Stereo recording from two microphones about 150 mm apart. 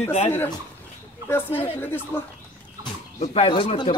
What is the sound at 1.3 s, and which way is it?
Speech, 15° left (ahead or behind).